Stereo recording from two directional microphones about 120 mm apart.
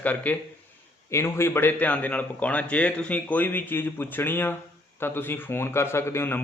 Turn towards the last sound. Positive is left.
turn(degrees=20)  # may be behind; listen again after turning